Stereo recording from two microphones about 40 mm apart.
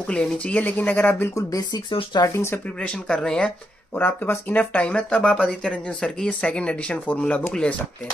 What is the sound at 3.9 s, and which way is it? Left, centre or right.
Speech, left.